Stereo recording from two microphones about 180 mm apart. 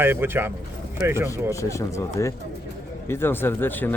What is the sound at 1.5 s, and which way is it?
Speech, 15° left (ahead or behind).